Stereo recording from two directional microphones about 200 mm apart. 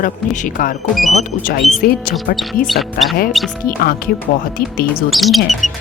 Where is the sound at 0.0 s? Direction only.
40° left (ahead or behind).